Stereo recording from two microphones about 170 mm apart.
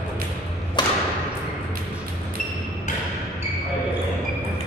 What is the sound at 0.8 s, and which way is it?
Thump, 25° left (ahead or behind).